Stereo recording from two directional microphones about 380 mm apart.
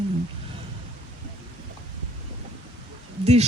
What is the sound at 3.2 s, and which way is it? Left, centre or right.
Speech, centre.